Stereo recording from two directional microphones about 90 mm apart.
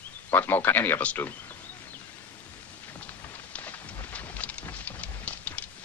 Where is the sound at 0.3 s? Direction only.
20° left (ahead or behind).